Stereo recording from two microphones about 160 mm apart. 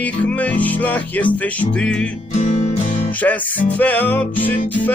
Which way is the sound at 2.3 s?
50° left (ahead or behind).